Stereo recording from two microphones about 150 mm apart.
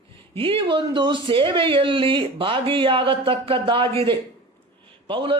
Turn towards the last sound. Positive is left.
turn(degrees=-35)  # may be behind; listen again after turning